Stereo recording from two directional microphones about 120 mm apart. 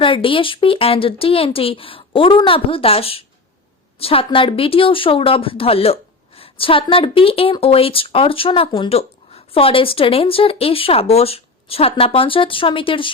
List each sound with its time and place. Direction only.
0.0 s speech: 45° left (ahead or behind)